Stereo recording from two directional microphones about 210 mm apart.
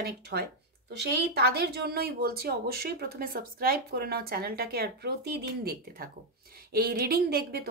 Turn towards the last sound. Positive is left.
turn(degrees=-50)  # may be behind; listen again after turning